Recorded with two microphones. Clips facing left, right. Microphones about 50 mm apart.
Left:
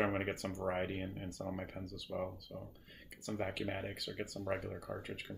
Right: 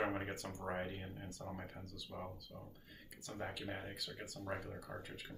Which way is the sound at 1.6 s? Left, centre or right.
Left.